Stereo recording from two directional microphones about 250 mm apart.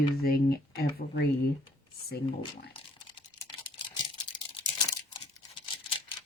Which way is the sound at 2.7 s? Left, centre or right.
Left.